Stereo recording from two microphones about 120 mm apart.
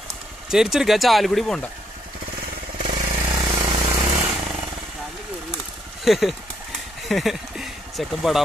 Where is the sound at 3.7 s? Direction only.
45° right (ahead or behind).